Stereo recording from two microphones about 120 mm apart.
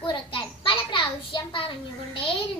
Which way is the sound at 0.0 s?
45° left (ahead or behind).